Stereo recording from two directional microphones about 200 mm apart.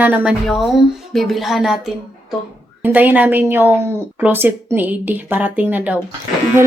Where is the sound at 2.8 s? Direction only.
10° right (ahead or behind).